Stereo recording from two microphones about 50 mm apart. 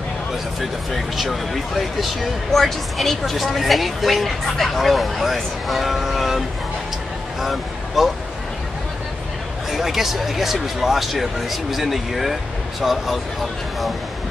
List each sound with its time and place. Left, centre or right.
0.6 s speech: centre
9.7 s speech: centre